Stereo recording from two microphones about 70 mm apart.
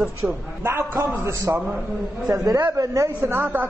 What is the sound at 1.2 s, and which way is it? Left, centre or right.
Speech, right.